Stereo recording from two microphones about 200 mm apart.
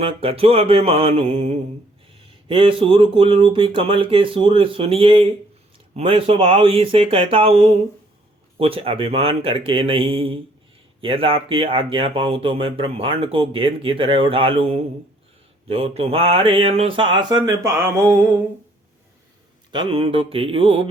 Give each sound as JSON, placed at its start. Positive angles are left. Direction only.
{"t": 0.0, "sound": "speech", "side_deg": -30}
{"t": 19.7, "sound": "speech", "side_deg": -25}